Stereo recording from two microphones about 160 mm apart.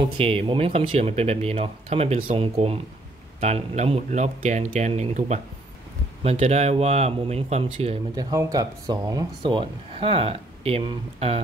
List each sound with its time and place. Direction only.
0.0 s speech: 35° right (ahead or behind)
8.2 s speech: 20° right (ahead or behind)
9.4 s speech: 30° right (ahead or behind)